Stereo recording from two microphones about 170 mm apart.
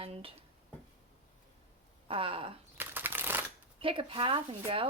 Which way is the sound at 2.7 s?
10° right (ahead or behind).